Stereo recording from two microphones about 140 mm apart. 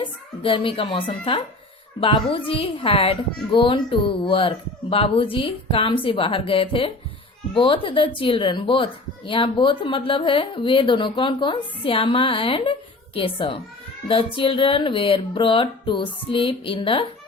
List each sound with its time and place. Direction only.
0.0 s a woman's voice: 40° left (ahead or behind)